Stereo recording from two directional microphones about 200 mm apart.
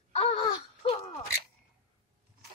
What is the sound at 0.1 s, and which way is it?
Wail, 30° left (ahead or behind).